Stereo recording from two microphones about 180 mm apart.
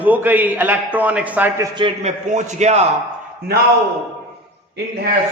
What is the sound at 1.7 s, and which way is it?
A man's voice, 30° right (ahead or behind).